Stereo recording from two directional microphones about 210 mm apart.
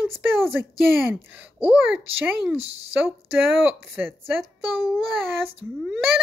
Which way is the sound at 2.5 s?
30° right (ahead or behind).